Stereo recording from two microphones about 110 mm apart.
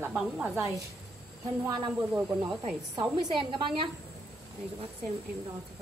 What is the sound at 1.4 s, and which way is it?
Speech, 30° right (ahead or behind).